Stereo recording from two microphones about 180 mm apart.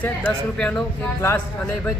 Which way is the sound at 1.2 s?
15° left (ahead or behind).